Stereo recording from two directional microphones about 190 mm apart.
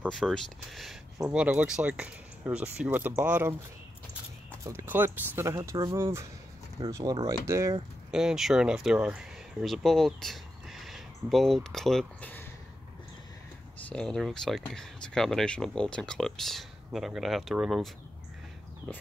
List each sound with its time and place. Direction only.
0.1 s speech: centre (ahead or behind)
4.6 s speech: 10° right (ahead or behind)
8.1 s speech: 5° right (ahead or behind)
13.8 s speech: 5° left (ahead or behind)